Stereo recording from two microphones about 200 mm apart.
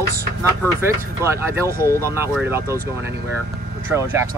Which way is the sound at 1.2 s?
15° right (ahead or behind).